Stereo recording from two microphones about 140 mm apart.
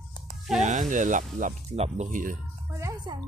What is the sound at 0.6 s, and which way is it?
Speech, 60° right (ahead or behind).